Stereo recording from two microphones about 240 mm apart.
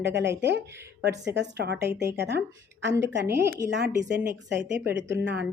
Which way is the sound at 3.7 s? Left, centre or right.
Right.